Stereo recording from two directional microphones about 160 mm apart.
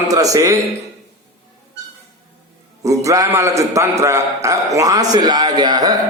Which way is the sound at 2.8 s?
20° right (ahead or behind).